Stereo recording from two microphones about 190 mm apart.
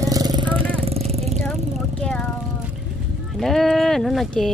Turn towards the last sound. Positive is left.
turn(degrees=0)  # may be behind; listen again after turning